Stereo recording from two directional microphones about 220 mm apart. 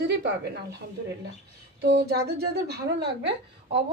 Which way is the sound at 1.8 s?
50° right (ahead or behind).